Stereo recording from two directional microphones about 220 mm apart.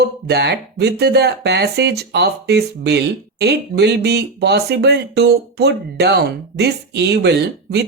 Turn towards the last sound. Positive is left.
turn(degrees=-50)  # may be behind; listen again after turning